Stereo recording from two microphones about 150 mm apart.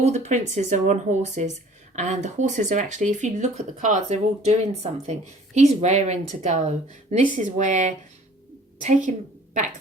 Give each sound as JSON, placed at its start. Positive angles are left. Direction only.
{"t": 0.0, "sound": "speech", "side_deg": -50}